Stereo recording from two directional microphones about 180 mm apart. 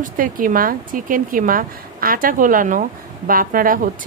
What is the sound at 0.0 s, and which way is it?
A woman's voice, 50° right (ahead or behind).